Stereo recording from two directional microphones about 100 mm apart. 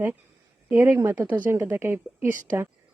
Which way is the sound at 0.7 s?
25° right (ahead or behind).